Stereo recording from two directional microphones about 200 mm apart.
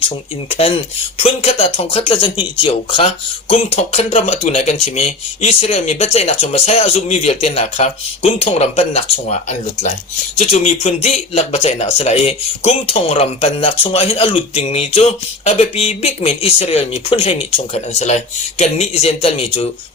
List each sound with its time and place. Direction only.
1.2 s speech: 30° left (ahead or behind)